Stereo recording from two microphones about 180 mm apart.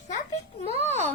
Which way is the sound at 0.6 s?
35° right (ahead or behind).